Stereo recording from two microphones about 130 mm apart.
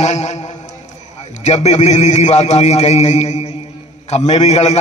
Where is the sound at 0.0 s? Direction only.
60° left (ahead or behind).